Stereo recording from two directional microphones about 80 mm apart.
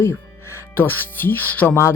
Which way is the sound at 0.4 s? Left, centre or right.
Left.